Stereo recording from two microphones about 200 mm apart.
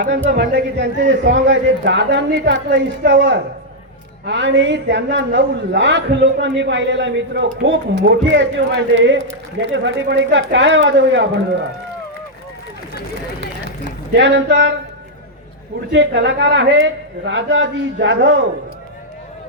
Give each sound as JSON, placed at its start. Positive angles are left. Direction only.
{"t": 0.3, "sound": "a man's voice", "side_deg": -60}
{"t": 3.1, "sound": "a man's voice", "side_deg": -65}
{"t": 14.2, "sound": "a man's voice", "side_deg": -65}
{"t": 15.9, "sound": "a man's voice", "side_deg": -60}